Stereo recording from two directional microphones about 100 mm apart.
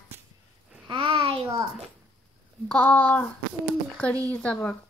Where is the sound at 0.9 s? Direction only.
60° right (ahead or behind).